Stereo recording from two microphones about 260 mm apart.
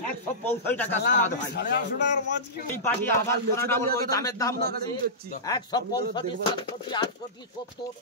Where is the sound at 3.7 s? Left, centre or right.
Centre.